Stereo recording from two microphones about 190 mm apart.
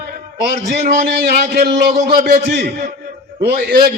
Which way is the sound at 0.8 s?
55° right (ahead or behind).